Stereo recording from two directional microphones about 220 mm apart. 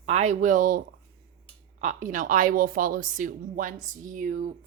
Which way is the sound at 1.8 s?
35° right (ahead or behind).